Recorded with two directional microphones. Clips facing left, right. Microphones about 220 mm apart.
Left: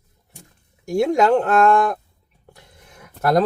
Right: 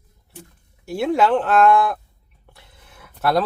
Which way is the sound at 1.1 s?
45° left (ahead or behind).